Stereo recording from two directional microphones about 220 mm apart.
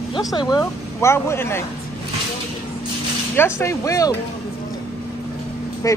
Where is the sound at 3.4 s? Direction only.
10° left (ahead or behind).